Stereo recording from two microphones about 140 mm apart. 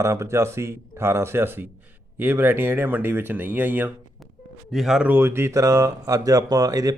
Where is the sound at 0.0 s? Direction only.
20° right (ahead or behind).